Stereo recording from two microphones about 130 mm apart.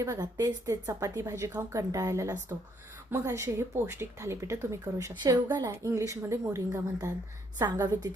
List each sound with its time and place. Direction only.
0.0 s speech: 25° right (ahead or behind)
7.6 s a woman's voice: 35° right (ahead or behind)